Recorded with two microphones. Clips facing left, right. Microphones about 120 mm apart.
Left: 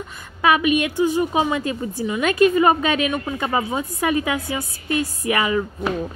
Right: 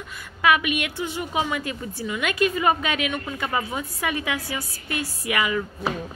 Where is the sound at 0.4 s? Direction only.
30° left (ahead or behind).